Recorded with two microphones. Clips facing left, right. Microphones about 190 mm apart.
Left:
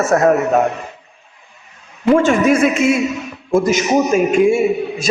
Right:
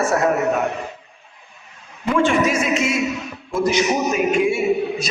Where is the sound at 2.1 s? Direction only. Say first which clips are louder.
Left 4 dB; 50° left (ahead or behind).